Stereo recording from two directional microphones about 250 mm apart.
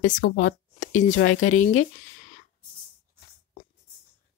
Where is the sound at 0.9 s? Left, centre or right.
Left.